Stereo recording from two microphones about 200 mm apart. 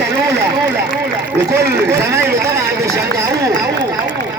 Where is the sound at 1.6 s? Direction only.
50° right (ahead or behind).